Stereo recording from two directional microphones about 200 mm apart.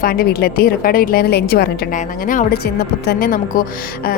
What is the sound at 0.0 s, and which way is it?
A woman's voice, 45° left (ahead or behind).